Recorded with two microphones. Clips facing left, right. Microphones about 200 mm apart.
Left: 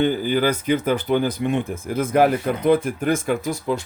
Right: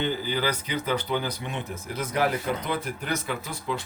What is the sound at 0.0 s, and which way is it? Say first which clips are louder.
Speech: left 8 dB; 50° left (ahead or behind).